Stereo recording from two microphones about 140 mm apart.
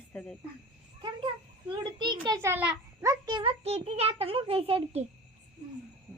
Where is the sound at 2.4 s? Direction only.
15° right (ahead or behind); by 5.0 s 45° right (ahead or behind).